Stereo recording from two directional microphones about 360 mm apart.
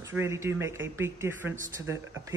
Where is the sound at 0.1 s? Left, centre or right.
Centre.